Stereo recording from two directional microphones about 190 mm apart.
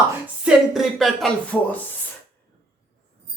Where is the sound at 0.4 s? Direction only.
Centre (ahead or behind).